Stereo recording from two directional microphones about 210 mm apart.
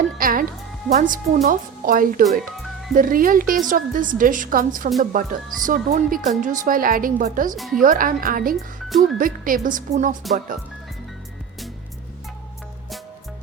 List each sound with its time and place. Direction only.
0.2 s a woman's voice: 40° right (ahead or behind)
7.5 s speech: centre (ahead or behind)
7.8 s a woman's voice: 40° right (ahead or behind)
8.5 s speech: centre (ahead or behind)
9.1 s a woman's voice: 40° right (ahead or behind)